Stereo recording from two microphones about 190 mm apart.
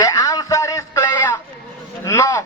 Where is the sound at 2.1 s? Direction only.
15° left (ahead or behind).